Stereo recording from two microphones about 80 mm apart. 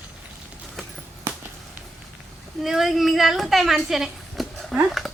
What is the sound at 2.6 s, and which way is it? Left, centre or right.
Speech, centre.